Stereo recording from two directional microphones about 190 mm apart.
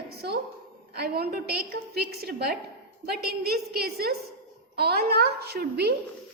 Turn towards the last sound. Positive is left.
turn(degrees=-60)  # may be behind; listen again after turning